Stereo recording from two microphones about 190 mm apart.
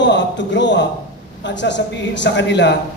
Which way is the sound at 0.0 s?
70° left (ahead or behind).